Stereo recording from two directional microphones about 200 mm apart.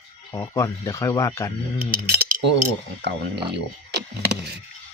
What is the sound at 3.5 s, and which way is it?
Speech, 55° right (ahead or behind).